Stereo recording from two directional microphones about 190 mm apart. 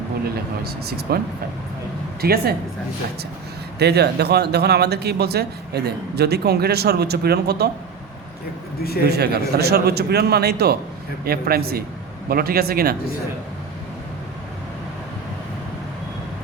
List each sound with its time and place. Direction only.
0.6 s speech: 55° right (ahead or behind)
2.2 s speech: 55° right (ahead or behind)
3.8 s speech: 60° right (ahead or behind)
9.0 s a man's voice: 60° right (ahead or behind)